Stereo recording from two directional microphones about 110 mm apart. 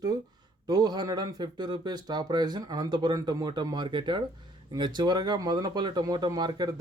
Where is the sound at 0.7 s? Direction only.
35° right (ahead or behind).